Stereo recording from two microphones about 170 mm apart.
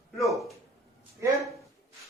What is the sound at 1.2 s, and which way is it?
Speech, 20° right (ahead or behind).